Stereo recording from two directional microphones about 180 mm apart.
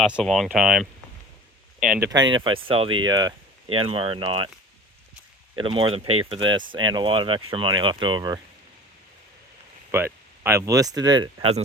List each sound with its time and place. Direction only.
0.0 s speech: centre (ahead or behind)
2.0 s speech: 25° right (ahead or behind)
5.5 s speech: 30° right (ahead or behind)
9.9 s speech: 10° right (ahead or behind)